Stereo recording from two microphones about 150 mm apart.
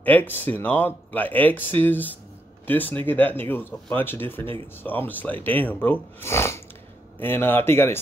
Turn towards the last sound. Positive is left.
turn(degrees=15)  # may be behind; listen again after turning